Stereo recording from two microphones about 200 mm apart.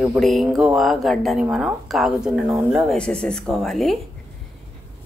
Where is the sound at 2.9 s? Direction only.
5° left (ahead or behind).